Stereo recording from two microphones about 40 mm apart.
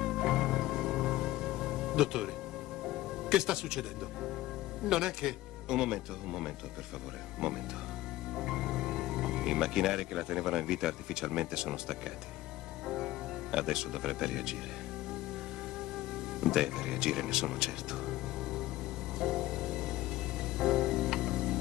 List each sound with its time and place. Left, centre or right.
0.0 s music: centre
4.8 s speech: centre
16.3 s speech: centre
19.1 s music: centre